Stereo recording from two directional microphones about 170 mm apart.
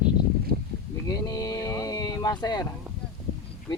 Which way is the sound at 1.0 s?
20° left (ahead or behind).